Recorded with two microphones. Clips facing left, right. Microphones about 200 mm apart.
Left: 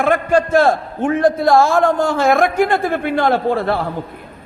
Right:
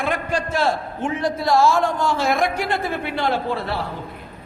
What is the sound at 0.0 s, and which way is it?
A man's voice, 50° left (ahead or behind).